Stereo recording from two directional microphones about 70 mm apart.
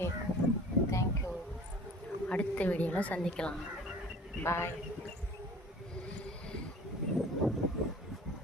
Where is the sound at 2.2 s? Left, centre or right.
Centre.